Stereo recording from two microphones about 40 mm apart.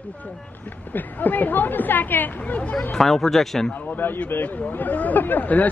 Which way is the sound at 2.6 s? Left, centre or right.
Left.